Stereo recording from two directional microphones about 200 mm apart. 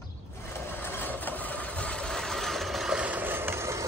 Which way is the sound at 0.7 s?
10° left (ahead or behind).